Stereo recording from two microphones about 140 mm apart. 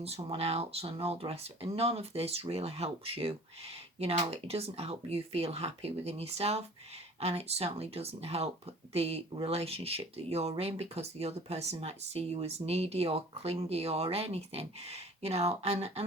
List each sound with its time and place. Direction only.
0.0 s speech: 45° right (ahead or behind)